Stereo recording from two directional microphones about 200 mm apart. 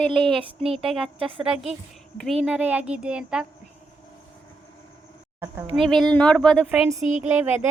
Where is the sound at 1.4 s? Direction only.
5° right (ahead or behind).